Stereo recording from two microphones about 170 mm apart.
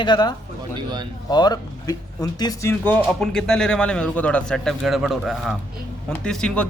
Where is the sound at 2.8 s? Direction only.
10° left (ahead or behind).